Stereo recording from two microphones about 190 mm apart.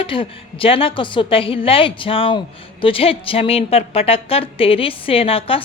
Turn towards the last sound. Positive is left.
turn(degrees=30)  # may be behind; listen again after turning